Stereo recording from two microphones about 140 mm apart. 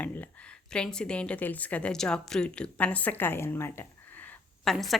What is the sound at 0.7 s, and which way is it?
A woman's voice, 5° left (ahead or behind).